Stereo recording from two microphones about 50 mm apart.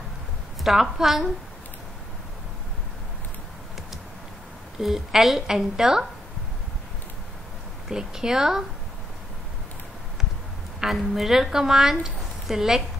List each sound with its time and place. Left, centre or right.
0.7 s a woman's voice: centre
4.7 s speech: centre
7.9 s speech: centre
10.8 s speech: centre